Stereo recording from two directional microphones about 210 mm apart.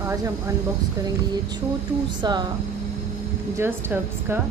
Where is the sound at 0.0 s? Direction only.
15° right (ahead or behind).